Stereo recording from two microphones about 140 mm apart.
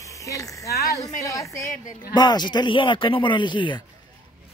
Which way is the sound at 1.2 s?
25° left (ahead or behind).